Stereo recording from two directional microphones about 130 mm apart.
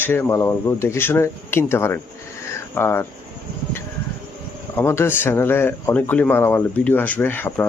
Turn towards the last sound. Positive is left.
turn(degrees=15)  # may be behind; listen again after turning